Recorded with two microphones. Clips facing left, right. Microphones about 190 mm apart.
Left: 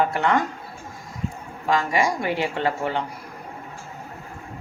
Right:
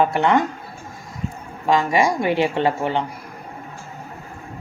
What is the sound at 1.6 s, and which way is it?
A woman's voice, 25° right (ahead or behind).